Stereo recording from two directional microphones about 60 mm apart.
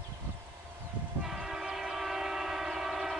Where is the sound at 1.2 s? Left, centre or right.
Centre.